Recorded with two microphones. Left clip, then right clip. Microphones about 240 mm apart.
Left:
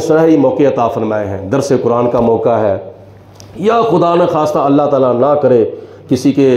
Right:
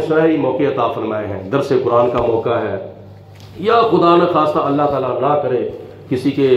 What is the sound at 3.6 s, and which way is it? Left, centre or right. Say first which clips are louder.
Speech: left 1 dB; left.